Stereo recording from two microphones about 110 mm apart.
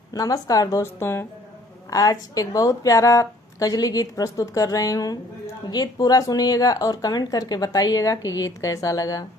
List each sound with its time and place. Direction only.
0.1 s speech: 35° left (ahead or behind)